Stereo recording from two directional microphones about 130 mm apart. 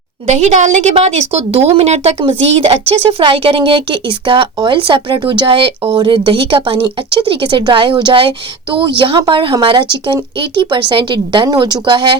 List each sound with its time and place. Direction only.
0.3 s a woman's voice: 60° right (ahead or behind); by 12.1 s 35° right (ahead or behind)